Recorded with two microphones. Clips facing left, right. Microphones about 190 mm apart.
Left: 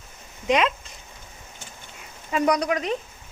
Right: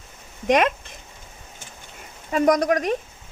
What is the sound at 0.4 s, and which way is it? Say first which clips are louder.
Speech: right 3 dB; 50° right (ahead or behind).